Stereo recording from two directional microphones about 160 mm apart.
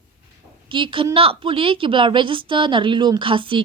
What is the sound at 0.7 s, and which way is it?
A woman's voice, 30° right (ahead or behind).